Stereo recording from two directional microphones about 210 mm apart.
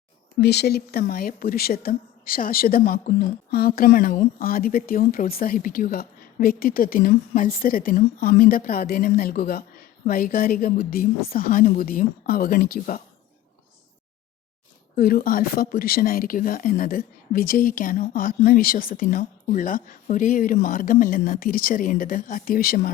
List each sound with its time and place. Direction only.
0.3 s speech: 50° left (ahead or behind)
14.9 s speech: 45° left (ahead or behind)